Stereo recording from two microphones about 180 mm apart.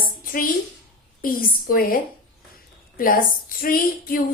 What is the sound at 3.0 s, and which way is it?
A woman's voice, 50° left (ahead or behind).